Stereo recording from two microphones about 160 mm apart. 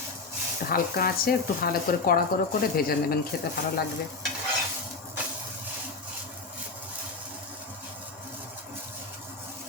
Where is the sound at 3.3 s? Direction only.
65° left (ahead or behind).